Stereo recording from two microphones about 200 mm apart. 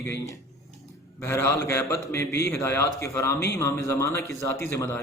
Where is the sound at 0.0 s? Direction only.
10° left (ahead or behind).